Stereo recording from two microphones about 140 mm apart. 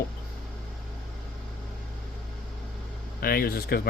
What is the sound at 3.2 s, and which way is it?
Speech, 90° left.